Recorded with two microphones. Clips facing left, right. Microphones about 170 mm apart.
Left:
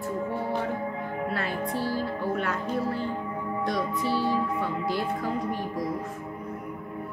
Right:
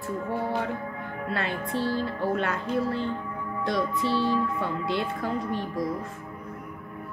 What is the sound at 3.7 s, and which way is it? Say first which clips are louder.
Speech: right 3 dB; 25° right (ahead or behind).